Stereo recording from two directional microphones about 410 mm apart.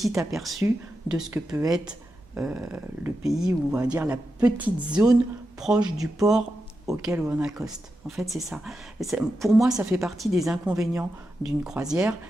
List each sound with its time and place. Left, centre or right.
0.0 s speech: centre